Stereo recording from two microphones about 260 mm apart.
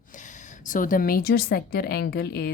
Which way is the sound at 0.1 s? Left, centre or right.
Left.